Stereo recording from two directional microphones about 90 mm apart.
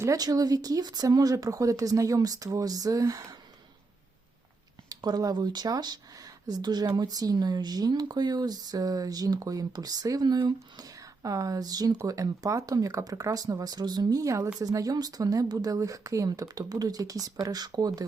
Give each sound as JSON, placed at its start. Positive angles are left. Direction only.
{"t": 0.0, "sound": "speech", "side_deg": -40}
{"t": 4.9, "sound": "speech", "side_deg": -45}